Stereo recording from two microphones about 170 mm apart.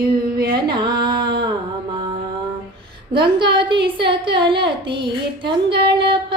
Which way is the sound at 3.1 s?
30° right (ahead or behind).